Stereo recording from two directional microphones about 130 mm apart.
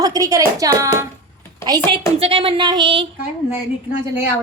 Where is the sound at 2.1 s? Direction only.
45° right (ahead or behind).